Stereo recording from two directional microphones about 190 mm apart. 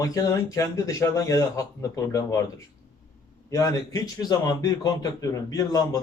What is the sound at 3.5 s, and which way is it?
A man's voice, 15° left (ahead or behind).